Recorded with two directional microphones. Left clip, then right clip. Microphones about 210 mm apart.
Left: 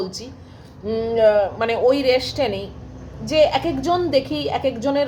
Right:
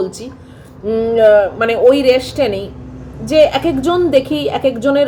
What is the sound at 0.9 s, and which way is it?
A woman's voice, 10° right (ahead or behind).